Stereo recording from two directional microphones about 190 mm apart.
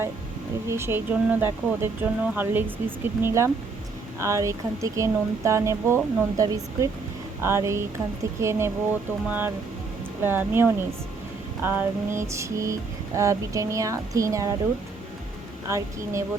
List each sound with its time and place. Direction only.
0.7 s mantra: 15° right (ahead or behind)
10.2 s mantra: 10° right (ahead or behind)
15.6 s mantra: 15° right (ahead or behind)